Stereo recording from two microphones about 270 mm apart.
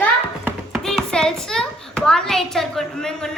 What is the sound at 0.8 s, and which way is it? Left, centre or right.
A woman's voice, centre.